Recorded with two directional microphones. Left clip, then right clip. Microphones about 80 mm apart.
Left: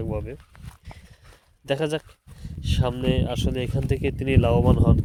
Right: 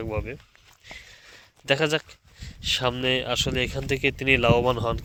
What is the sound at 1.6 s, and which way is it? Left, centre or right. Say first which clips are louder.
Speech: right 3 dB; left.